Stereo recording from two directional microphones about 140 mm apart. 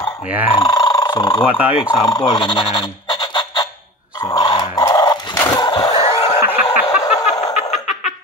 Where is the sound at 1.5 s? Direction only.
10° right (ahead or behind).